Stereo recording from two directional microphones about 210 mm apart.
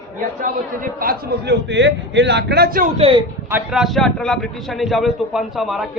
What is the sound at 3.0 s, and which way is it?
Speech, 25° right (ahead or behind).